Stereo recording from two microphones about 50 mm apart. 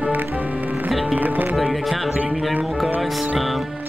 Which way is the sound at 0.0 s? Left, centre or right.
Right.